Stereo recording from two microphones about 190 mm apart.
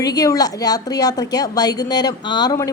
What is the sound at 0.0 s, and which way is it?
A woman's voice, 20° left (ahead or behind).